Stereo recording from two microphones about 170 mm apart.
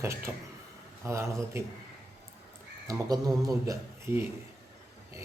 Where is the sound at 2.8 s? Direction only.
20° right (ahead or behind).